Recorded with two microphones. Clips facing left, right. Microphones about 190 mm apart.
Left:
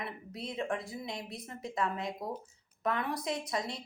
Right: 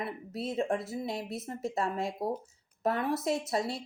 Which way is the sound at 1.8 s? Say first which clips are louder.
Right 1 dB; 35° right (ahead or behind).